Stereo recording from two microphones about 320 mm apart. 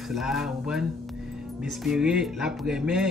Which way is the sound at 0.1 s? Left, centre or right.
Centre.